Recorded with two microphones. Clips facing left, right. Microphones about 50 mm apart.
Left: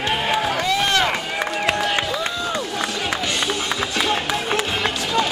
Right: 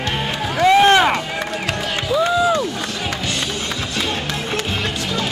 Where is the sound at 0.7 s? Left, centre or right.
Right.